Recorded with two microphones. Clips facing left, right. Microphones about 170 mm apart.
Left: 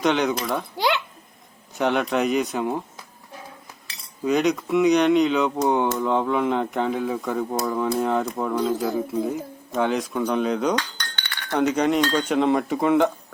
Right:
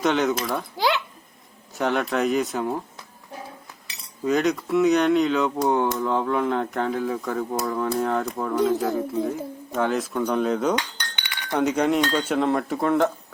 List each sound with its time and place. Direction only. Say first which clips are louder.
0.0 s speech: even; centre (ahead or behind)
4.3 s speech: left 1 dB; centre (ahead or behind)
9.7 s speech: left 1 dB; centre (ahead or behind)
10.8 s cutlery: left 1 dB; 15° right (ahead or behind)
11.5 s speech: left 1 dB; 10° right (ahead or behind)